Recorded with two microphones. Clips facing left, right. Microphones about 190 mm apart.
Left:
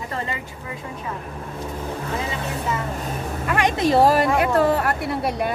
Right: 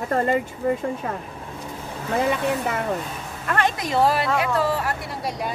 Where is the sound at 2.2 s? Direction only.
60° right (ahead or behind).